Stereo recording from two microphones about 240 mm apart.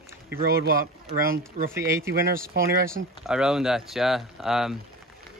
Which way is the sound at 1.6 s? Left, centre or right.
Right.